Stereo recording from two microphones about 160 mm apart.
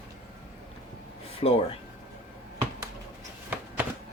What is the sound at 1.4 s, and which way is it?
Speech, 35° left (ahead or behind).